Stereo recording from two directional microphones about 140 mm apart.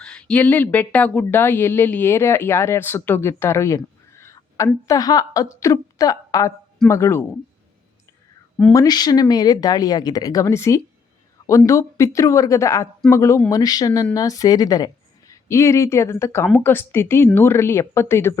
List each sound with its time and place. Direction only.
0.0 s a woman's voice: 5° left (ahead or behind)
8.7 s speech: 25° left (ahead or behind)